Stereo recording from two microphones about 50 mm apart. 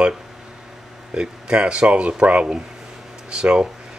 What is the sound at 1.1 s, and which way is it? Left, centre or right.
Speech, centre.